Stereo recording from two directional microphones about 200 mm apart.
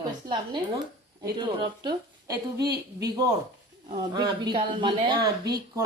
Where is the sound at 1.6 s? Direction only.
20° right (ahead or behind).